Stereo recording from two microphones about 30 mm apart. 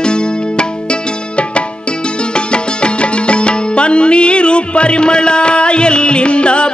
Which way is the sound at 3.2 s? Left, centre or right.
Left.